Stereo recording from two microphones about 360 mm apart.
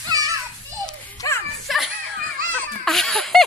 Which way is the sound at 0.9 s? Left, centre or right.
Centre.